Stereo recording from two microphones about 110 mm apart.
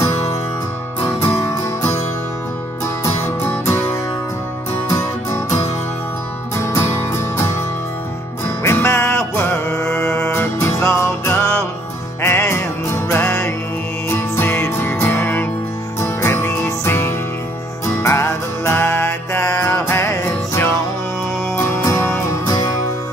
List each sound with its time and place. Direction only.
1.0 s music: 20° left (ahead or behind)
4.9 s music: 30° left (ahead or behind)
8.6 s music: 25° left (ahead or behind)